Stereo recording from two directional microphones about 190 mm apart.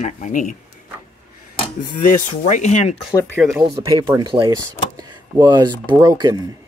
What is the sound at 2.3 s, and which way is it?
Speech, 35° left (ahead or behind).